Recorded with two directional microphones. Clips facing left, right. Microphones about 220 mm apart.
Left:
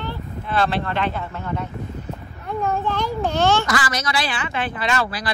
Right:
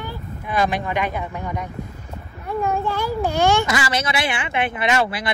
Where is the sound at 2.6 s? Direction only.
10° right (ahead or behind).